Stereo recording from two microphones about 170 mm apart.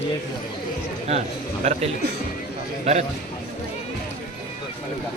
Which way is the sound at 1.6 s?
40° right (ahead or behind).